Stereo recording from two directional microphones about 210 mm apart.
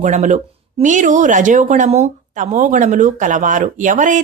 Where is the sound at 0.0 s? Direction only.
35° right (ahead or behind).